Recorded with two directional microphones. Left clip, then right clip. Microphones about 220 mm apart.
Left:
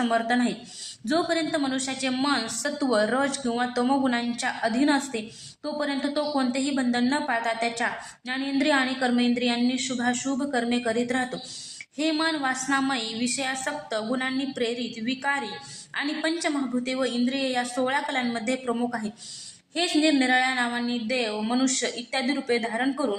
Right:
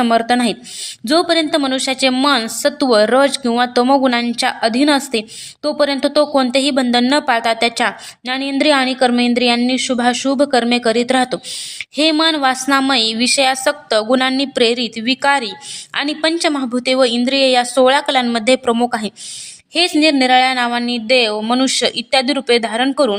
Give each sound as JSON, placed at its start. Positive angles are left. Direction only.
{"t": 0.0, "sound": "a woman's voice", "side_deg": -40}